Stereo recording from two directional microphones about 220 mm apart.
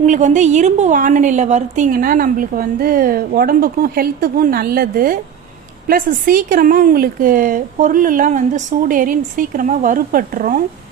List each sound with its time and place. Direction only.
0.0 s a woman's voice: 35° right (ahead or behind)